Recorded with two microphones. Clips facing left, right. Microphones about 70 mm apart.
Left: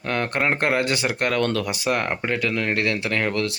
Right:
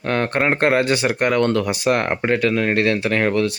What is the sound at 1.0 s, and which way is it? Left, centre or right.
Speech, centre.